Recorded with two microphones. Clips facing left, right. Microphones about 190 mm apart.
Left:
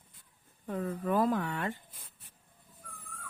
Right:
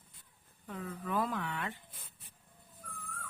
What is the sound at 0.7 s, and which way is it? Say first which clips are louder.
Speech: left 7 dB; 40° left (ahead or behind).